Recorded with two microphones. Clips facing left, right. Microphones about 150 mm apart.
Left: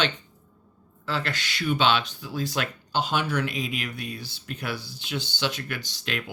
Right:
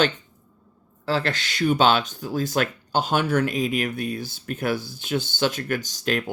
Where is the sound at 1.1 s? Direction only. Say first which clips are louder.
Right 5 dB; 35° right (ahead or behind).